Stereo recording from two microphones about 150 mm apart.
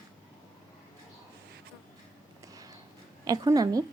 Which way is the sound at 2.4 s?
25° right (ahead or behind).